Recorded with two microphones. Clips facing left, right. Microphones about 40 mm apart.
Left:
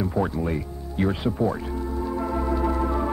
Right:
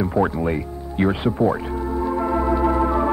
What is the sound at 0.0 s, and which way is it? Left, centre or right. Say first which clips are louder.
Music: right 5 dB; right.